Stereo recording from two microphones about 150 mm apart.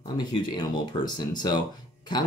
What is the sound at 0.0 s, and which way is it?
Speech, 30° left (ahead or behind).